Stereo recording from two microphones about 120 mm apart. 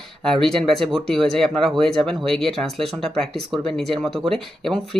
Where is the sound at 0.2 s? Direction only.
5° left (ahead or behind).